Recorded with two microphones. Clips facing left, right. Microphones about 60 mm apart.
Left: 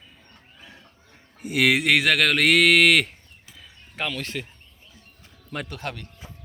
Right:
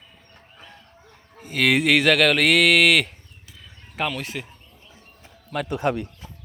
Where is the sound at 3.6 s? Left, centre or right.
Centre.